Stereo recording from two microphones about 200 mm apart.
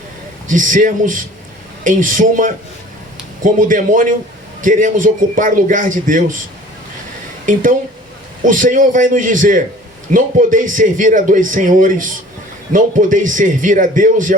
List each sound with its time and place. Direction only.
0.4 s speech: 40° right (ahead or behind)
7.4 s speech: 40° right (ahead or behind)